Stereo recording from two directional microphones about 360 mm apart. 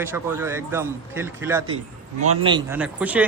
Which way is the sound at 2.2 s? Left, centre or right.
Right.